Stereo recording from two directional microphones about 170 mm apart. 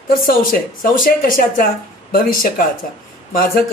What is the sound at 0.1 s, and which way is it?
Speech, 55° left (ahead or behind).